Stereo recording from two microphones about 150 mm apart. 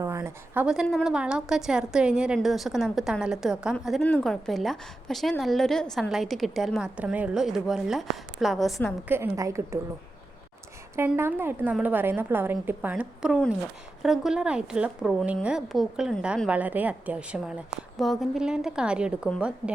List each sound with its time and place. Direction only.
0.0 s a woman's voice: 20° right (ahead or behind); by 8.7 s centre (ahead or behind)
9.0 s a woman's voice: 15° right (ahead or behind)
10.9 s a woman's voice: 15° right (ahead or behind)